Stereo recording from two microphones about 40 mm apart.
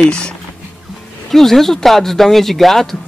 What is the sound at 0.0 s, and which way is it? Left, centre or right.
Speech, left.